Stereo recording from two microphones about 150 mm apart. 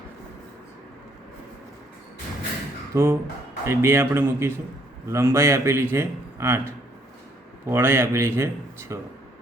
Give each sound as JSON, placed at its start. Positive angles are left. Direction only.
{"t": 2.9, "sound": "a man's voice", "side_deg": -15}